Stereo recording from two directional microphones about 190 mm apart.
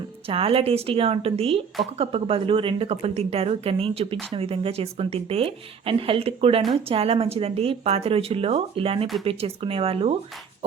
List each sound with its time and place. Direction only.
0.3 s speech: 30° right (ahead or behind)